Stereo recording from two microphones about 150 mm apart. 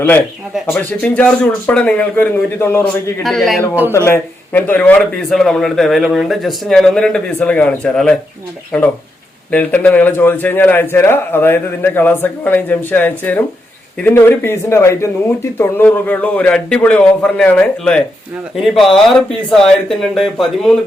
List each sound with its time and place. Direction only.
0.7 s a man's voice: 10° left (ahead or behind)
3.2 s speech: centre (ahead or behind)
3.9 s speech: 15° left (ahead or behind)
9.5 s a man's voice: 10° left (ahead or behind)